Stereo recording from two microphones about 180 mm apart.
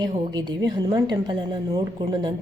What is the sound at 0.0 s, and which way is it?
A woman's voice, 25° right (ahead or behind).